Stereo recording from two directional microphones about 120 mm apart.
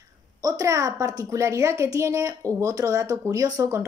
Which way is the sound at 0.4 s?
30° right (ahead or behind).